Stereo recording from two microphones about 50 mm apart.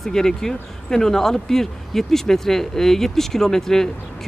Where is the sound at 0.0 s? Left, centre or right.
Centre.